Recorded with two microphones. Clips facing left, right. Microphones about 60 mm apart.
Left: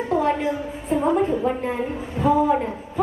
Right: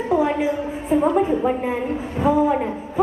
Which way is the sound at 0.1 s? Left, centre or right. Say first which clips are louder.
Right 2 dB; centre.